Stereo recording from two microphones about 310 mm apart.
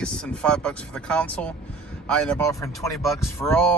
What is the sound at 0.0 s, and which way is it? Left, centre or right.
A man's voice, centre.